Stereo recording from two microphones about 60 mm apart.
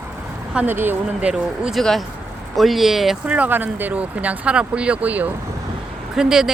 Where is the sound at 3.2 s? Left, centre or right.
Right.